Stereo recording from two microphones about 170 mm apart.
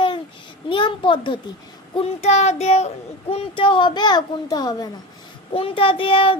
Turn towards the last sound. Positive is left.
turn(degrees=30)  # may be behind; listen again after turning